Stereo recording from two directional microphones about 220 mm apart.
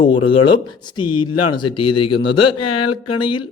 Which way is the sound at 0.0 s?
25° left (ahead or behind).